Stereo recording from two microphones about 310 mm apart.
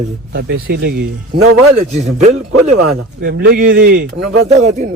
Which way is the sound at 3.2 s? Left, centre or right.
Right.